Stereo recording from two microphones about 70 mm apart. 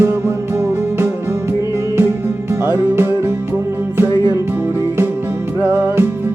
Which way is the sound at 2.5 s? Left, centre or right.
Right.